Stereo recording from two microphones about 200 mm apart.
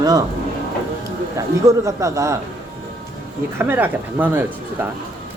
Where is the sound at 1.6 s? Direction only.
15° right (ahead or behind).